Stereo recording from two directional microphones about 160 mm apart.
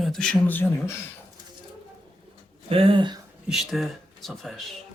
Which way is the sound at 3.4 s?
Centre (ahead or behind).